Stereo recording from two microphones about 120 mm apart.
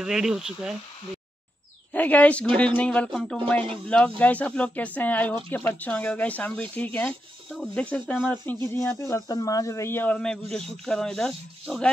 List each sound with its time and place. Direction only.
0.0 s speech: 5° right (ahead or behind)
1.9 s speech: 15° left (ahead or behind)
8.5 s speech: 25° left (ahead or behind); by 11.9 s 5° left (ahead or behind)